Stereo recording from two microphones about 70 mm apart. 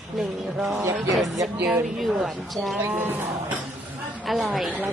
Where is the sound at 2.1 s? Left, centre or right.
Centre.